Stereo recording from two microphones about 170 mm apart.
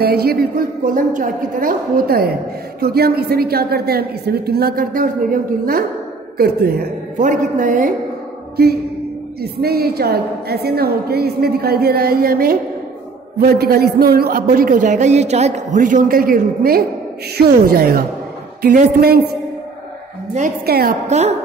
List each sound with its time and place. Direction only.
0.0 s a man's voice: 65° right (ahead or behind)
7.2 s a man's voice: 45° right (ahead or behind)
8.6 s a woman's voice: 70° right (ahead or behind)
20.6 s a woman's voice: 65° right (ahead or behind)
21.1 s a woman's voice: 40° right (ahead or behind)